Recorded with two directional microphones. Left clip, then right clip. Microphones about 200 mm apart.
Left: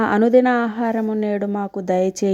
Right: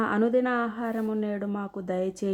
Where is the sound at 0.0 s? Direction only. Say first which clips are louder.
Left 10 dB; 30° left (ahead or behind).